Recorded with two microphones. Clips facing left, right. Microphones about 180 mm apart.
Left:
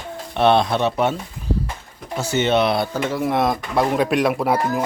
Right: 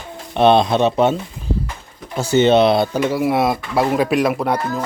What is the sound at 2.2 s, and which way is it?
Speech, 30° right (ahead or behind).